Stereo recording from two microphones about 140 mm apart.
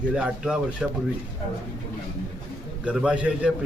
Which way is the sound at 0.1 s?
5° right (ahead or behind).